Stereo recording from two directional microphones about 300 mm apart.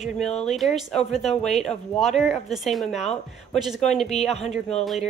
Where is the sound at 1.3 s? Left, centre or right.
Left.